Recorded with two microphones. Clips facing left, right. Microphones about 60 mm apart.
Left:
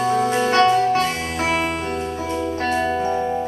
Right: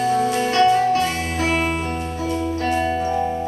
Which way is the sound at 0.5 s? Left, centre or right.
Left.